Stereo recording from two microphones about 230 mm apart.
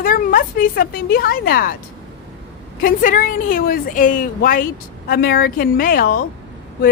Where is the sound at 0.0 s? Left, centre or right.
Left.